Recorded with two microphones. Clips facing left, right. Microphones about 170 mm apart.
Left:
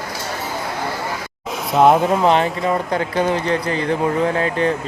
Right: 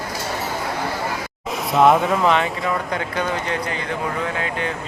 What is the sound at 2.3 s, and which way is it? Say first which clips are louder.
Speech: left 3 dB; 35° left (ahead or behind).